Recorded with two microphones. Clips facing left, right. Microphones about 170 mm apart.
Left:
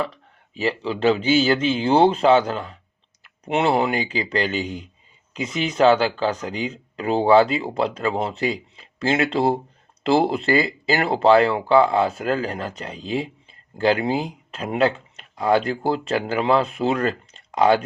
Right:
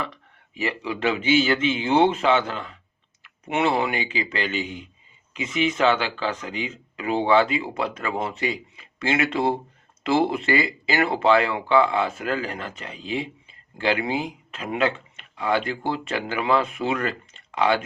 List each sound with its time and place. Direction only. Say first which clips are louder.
0.5 s speech: left 4 dB; 30° left (ahead or behind)